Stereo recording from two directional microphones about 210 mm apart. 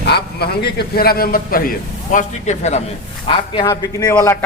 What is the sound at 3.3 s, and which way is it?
Speech, 20° left (ahead or behind).